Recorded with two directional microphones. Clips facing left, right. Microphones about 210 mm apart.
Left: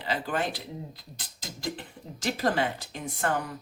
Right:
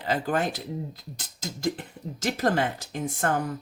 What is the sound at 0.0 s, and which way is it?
Speech, 45° right (ahead or behind).